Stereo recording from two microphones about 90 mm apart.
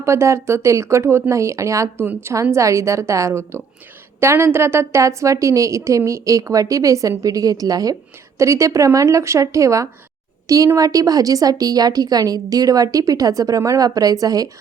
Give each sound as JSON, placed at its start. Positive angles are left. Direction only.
{"t": 0.0, "sound": "a woman's voice", "side_deg": -30}